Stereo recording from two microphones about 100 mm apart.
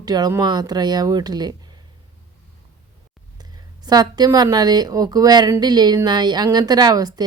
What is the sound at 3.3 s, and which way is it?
Speech, 45° right (ahead or behind).